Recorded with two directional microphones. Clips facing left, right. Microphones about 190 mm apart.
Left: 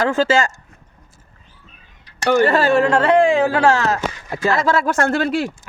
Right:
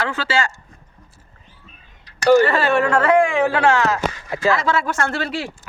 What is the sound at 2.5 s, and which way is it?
Speech, 40° left (ahead or behind).